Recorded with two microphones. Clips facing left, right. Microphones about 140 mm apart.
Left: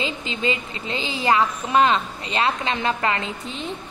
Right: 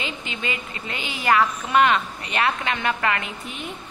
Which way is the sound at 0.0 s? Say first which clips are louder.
Left 5 dB; 25° left (ahead or behind).